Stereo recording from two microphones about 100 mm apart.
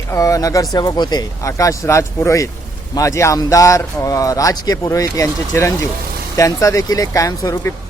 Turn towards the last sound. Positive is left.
turn(degrees=30)  # may be behind; listen again after turning